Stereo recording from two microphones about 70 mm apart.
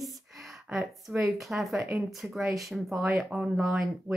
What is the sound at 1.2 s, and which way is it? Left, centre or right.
Speech, centre.